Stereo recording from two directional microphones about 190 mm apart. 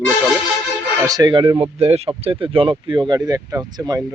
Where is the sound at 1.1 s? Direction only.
20° right (ahead or behind).